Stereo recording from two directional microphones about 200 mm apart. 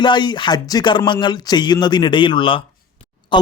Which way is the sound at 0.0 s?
20° left (ahead or behind).